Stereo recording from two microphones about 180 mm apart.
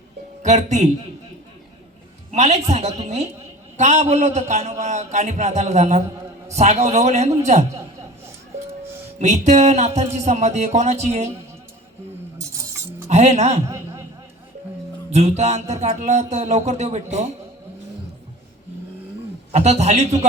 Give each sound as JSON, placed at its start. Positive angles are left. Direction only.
{"t": 0.4, "sound": "a man's voice", "side_deg": -40}
{"t": 2.3, "sound": "a man's voice", "side_deg": -35}
{"t": 9.1, "sound": "a man's voice", "side_deg": -40}
{"t": 13.1, "sound": "a man's voice", "side_deg": -40}
{"t": 13.7, "sound": "a sound", "side_deg": -15}
{"t": 15.1, "sound": "a man's voice", "side_deg": -35}
{"t": 19.5, "sound": "a man's voice", "side_deg": -35}